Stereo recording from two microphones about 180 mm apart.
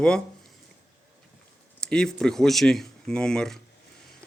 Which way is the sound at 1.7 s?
5° left (ahead or behind).